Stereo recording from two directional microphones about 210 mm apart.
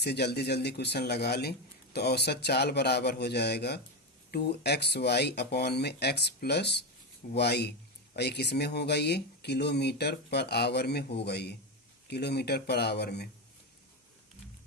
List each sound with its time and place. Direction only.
0.0 s speech: 50° left (ahead or behind)